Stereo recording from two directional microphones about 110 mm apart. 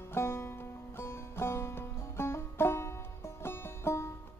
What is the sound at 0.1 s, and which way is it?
Music, 25° left (ahead or behind).